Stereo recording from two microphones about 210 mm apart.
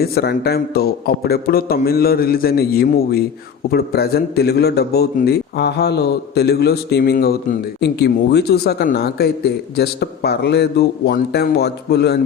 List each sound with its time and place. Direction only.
0.0 s speech: 50° left (ahead or behind)